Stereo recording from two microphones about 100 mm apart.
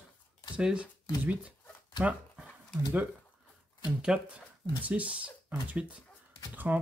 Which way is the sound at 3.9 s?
10° right (ahead or behind).